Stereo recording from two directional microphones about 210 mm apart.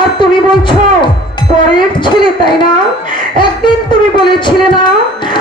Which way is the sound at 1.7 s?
20° left (ahead or behind).